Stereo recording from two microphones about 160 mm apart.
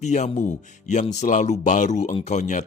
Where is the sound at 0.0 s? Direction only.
50° left (ahead or behind).